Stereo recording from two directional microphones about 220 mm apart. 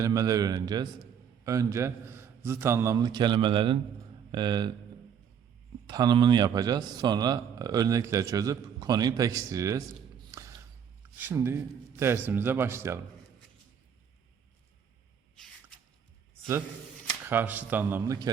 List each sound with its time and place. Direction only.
0.0 s a man's voice: 15° right (ahead or behind)
5.8 s a man's voice: 20° right (ahead or behind)
11.2 s a man's voice: 10° right (ahead or behind)
17.2 s a man's voice: 10° right (ahead or behind)